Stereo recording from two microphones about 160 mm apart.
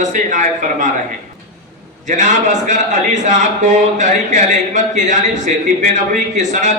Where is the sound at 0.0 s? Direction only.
55° right (ahead or behind).